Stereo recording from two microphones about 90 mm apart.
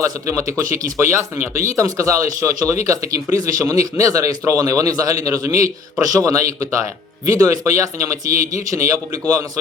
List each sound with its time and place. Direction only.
0.0 s speech: 35° right (ahead or behind)